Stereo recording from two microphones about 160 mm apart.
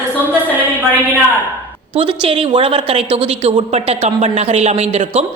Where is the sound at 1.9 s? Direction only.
35° right (ahead or behind).